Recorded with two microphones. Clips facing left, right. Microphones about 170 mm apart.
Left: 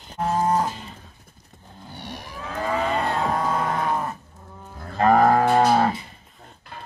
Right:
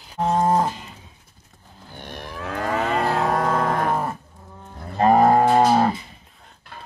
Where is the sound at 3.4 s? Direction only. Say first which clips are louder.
Right 3 dB; 50° right (ahead or behind).